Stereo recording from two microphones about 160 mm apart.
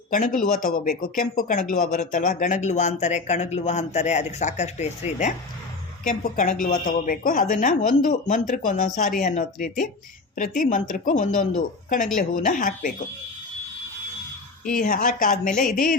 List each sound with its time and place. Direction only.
0.1 s a woman's voice: 60° left (ahead or behind)
14.6 s a woman's voice: 55° left (ahead or behind)